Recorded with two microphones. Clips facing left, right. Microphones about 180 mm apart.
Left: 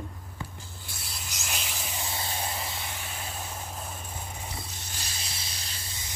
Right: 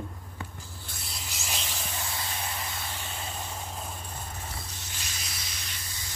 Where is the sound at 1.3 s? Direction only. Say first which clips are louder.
Even; centre (ahead or behind).